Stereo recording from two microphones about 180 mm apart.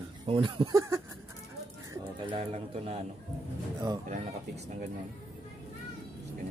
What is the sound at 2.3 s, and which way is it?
Speech, 30° right (ahead or behind).